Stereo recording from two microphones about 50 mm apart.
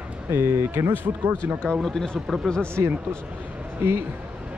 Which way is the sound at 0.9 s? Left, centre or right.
Right.